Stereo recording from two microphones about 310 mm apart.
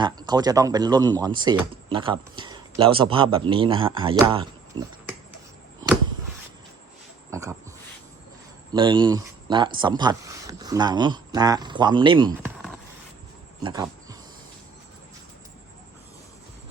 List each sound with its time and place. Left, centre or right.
0.0 s speech: centre
7.3 s speech: centre
8.7 s speech: centre
13.6 s a sound: centre